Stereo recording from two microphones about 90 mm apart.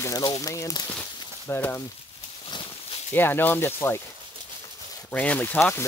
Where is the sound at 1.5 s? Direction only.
25° left (ahead or behind).